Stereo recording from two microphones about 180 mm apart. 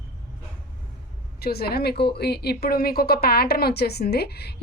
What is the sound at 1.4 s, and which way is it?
Speech, 60° left (ahead or behind).